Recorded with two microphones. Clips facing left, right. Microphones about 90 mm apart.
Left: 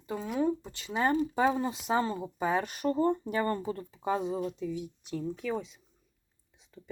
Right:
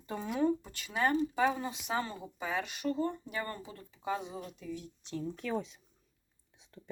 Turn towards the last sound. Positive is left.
turn(degrees=0)  # may be behind; listen again after turning